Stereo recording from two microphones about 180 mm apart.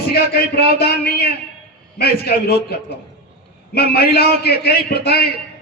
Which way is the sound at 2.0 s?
60° left (ahead or behind).